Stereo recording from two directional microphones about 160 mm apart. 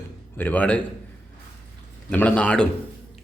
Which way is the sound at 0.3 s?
10° left (ahead or behind).